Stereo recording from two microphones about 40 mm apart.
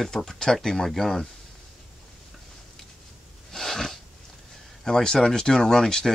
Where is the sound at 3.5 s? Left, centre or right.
Centre.